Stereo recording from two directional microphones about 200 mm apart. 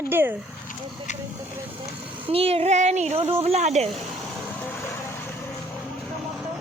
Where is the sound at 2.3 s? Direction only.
30° right (ahead or behind).